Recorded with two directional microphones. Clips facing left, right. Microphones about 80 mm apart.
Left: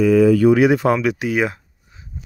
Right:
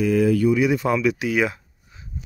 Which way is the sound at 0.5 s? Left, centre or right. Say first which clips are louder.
Left 5 dB; left.